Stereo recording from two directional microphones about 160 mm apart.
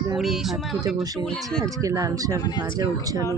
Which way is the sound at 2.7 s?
20° right (ahead or behind).